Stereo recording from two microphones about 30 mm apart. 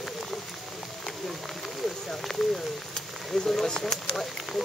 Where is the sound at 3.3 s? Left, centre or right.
Left.